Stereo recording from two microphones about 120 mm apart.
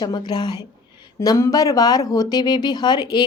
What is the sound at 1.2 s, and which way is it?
A woman's voice, 25° left (ahead or behind).